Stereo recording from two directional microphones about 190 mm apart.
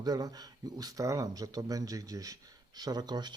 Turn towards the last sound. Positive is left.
turn(degrees=-20)  # may be behind; listen again after turning